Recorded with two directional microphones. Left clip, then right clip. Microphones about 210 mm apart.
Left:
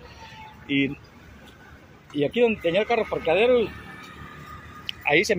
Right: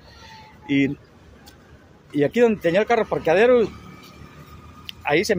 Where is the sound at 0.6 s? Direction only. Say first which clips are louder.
Right 3 dB; 90° right.